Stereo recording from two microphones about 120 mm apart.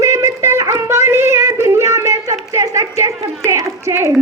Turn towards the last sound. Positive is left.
turn(degrees=-25)  # may be behind; listen again after turning